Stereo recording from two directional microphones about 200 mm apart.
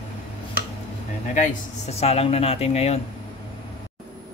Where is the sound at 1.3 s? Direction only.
35° left (ahead or behind).